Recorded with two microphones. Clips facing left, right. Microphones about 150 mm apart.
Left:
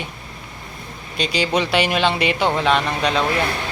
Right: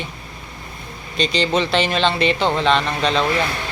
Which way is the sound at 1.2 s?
10° left (ahead or behind).